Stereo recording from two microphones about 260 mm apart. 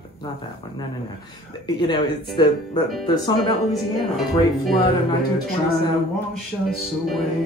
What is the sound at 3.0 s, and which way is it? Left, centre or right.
Speech, centre.